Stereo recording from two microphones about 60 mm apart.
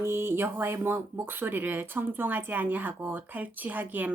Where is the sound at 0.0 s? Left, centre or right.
Right.